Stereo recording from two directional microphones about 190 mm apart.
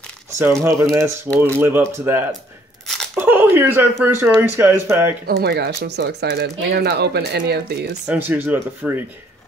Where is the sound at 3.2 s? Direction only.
10° right (ahead or behind).